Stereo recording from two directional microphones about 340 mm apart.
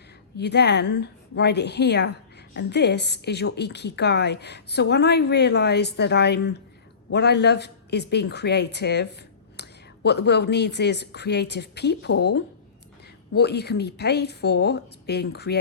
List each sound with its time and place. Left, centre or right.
0.3 s a woman's voice: left